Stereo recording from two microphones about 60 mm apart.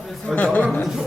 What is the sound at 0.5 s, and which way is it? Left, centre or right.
Speech, left.